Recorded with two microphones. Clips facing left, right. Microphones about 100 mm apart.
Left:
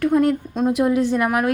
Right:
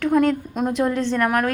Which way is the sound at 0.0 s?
5° left (ahead or behind).